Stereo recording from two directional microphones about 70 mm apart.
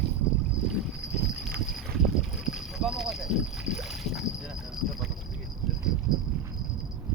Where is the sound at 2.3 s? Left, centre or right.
Centre.